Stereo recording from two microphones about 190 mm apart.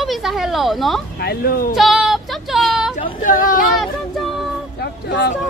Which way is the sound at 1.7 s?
Centre (ahead or behind).